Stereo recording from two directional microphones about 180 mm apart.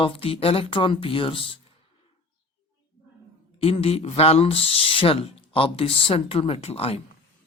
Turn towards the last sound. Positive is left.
turn(degrees=35)  # may be behind; listen again after turning